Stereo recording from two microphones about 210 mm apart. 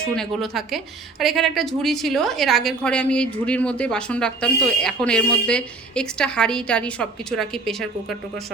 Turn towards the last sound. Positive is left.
turn(degrees=0)  # may be behind; listen again after turning